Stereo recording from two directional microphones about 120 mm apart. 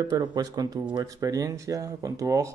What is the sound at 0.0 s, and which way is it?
Speech, 35° right (ahead or behind).